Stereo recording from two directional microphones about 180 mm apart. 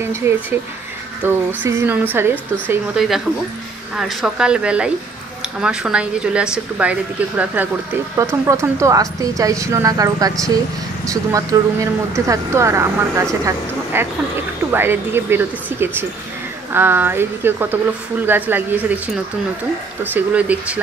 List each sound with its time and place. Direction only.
0.2 s a woman's voice: 15° right (ahead or behind)
20.0 s speech: 10° right (ahead or behind)